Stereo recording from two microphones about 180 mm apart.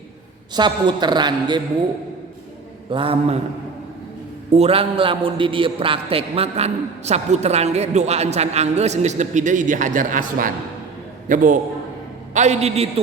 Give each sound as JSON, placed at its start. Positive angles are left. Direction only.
{"t": 0.5, "sound": "a man's voice", "side_deg": -25}
{"t": 2.9, "sound": "a man's voice", "side_deg": -30}
{"t": 4.5, "sound": "a man's voice", "side_deg": -35}